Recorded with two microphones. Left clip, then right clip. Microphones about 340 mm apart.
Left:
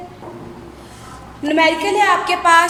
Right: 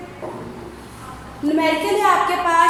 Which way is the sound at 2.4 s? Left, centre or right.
Left.